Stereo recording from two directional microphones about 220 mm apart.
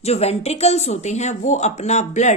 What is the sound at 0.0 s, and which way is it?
Speech, 30° left (ahead or behind).